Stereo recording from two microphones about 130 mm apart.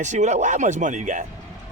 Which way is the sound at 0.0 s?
65° right (ahead or behind).